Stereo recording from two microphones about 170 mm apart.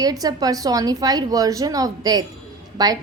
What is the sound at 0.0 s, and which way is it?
A woman's voice, 20° right (ahead or behind).